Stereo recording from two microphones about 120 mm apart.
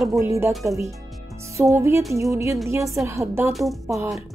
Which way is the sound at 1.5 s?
25° right (ahead or behind).